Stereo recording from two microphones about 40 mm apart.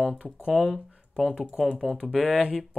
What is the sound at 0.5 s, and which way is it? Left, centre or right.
Speech, centre.